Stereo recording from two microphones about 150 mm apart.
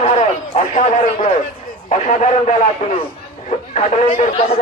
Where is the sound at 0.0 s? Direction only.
50° left (ahead or behind).